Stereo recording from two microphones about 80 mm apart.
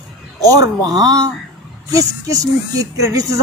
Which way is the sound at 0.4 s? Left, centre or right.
Right.